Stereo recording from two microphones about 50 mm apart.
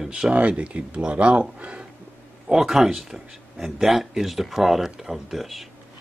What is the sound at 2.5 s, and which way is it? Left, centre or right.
A man's voice, centre.